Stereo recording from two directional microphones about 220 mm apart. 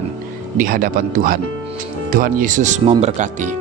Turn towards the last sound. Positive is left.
turn(degrees=-35)  # may be behind; listen again after turning